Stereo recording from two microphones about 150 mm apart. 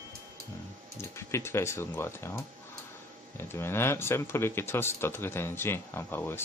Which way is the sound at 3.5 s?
15° left (ahead or behind).